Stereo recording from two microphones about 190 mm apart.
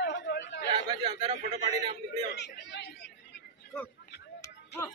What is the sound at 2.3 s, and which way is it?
Speech, 65° left (ahead or behind).